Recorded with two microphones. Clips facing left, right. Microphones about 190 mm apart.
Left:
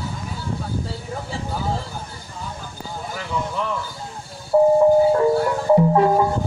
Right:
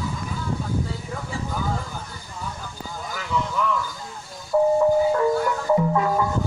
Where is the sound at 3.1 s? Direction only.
30° left (ahead or behind).